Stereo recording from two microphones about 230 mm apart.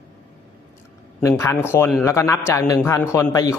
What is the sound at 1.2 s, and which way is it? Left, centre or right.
Speech, centre.